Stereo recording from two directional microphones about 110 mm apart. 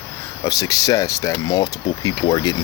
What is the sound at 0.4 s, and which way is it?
Speech, 30° left (ahead or behind).